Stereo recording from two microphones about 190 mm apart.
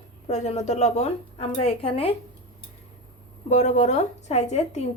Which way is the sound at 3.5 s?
35° left (ahead or behind).